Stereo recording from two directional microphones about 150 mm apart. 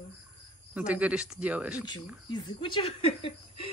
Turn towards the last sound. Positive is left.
turn(degrees=40)  # may be behind; listen again after turning